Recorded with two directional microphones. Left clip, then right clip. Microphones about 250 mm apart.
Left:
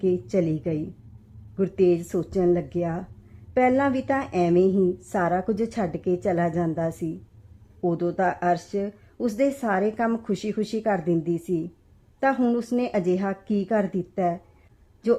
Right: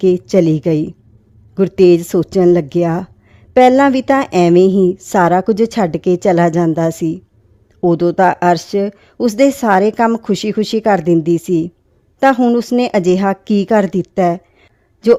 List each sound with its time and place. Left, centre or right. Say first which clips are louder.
0.0 s speech: right 12 dB; right